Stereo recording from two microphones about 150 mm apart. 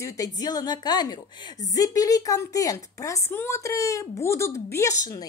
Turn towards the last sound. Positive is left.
turn(degrees=20)  # may be behind; listen again after turning